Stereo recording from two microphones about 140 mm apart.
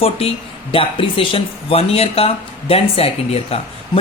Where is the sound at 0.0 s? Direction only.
45° left (ahead or behind).